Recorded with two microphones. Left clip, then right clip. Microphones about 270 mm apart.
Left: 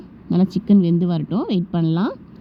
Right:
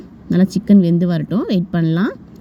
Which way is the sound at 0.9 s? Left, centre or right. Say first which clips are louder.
Right 3 dB; right.